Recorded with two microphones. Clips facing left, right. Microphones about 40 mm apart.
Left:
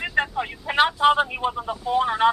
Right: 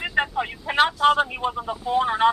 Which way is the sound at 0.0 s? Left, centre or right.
Centre.